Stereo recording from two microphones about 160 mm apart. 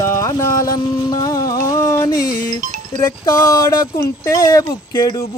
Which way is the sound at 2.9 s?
50° right (ahead or behind).